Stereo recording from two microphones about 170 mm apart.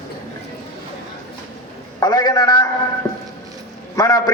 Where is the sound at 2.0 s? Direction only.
25° left (ahead or behind).